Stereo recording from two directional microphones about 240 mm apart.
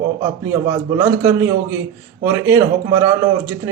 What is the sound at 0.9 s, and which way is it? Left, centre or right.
Speech, centre.